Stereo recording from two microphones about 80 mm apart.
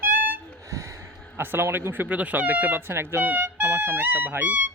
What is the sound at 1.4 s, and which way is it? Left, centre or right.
Speech, right.